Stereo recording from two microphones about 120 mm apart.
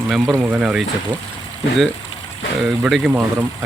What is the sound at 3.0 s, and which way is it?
Speech, 20° right (ahead or behind).